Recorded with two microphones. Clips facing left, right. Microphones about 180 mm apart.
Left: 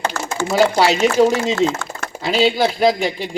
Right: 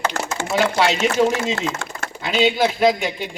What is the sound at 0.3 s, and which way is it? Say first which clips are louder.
Speech: left 6 dB; 35° left (ahead or behind).